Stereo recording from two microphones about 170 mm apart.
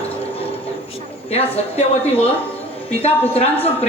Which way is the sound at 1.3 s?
35° left (ahead or behind).